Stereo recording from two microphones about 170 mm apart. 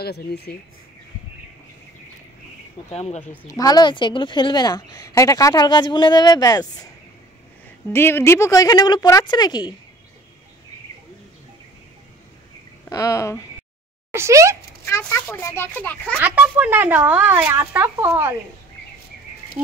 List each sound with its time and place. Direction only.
0.0 s speech: 70° left (ahead or behind)
2.9 s speech: 40° left (ahead or behind)
3.4 s a woman's voice: 20° left (ahead or behind)
7.9 s a woman's voice: 15° left (ahead or behind)
12.9 s a woman's voice: 20° left (ahead or behind)
14.1 s speech: 15° right (ahead or behind)
14.9 s speech: 15° left (ahead or behind)
16.2 s speech: 10° right (ahead or behind)